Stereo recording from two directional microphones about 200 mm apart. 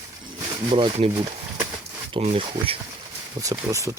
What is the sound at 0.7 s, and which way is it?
Speech, 25° right (ahead or behind).